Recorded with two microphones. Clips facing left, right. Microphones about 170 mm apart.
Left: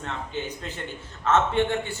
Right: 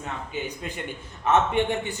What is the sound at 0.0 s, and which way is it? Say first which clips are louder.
A man's voice: even; 10° right (ahead or behind).